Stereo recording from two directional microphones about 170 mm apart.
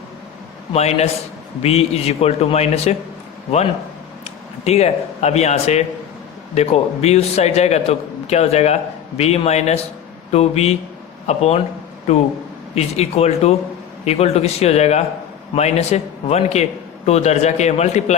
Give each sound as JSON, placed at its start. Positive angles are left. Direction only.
{"t": 0.7, "sound": "a man's voice", "side_deg": 40}
{"t": 4.2, "sound": "a man's voice", "side_deg": 40}